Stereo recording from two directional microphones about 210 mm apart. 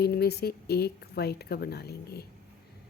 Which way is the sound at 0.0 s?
50° left (ahead or behind).